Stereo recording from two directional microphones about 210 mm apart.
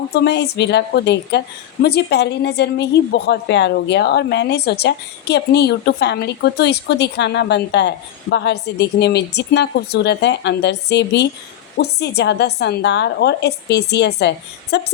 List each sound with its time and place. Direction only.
0.1 s a woman's voice: 50° left (ahead or behind)